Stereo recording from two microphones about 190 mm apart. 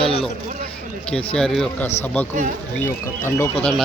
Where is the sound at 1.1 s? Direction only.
5° left (ahead or behind).